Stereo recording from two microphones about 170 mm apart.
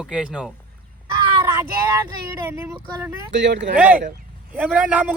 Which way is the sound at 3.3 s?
90° right.